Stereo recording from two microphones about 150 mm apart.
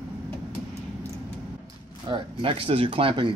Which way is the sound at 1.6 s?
35° right (ahead or behind).